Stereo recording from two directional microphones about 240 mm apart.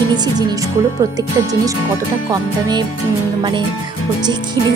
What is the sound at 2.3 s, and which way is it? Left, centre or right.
Speech, centre.